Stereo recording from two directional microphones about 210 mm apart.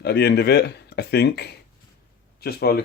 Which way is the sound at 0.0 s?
50° left (ahead or behind).